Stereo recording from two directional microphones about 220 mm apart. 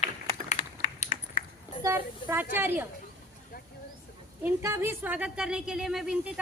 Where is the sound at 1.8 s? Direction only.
10° right (ahead or behind).